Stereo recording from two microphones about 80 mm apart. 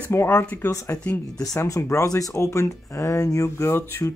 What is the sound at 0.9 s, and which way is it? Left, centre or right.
Speech, centre.